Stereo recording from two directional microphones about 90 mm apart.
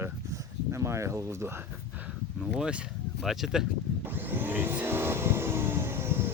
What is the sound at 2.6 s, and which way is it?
Speech, 10° right (ahead or behind).